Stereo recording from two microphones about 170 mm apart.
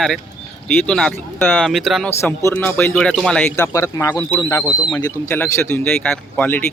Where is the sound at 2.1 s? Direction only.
15° left (ahead or behind).